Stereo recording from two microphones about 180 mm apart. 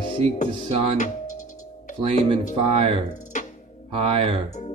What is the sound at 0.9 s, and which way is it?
Music, 45° left (ahead or behind).